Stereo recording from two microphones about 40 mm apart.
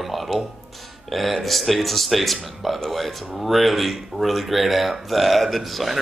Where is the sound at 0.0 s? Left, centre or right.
Centre.